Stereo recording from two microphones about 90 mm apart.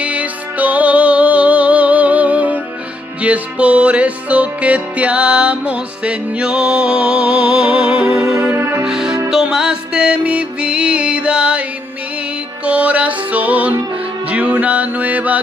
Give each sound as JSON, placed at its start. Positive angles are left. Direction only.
{"t": 0.0, "sound": "music", "side_deg": -15}
{"t": 8.5, "sound": "music", "side_deg": -25}
{"t": 8.8, "sound": "music", "side_deg": -5}
{"t": 12.6, "sound": "music", "side_deg": -15}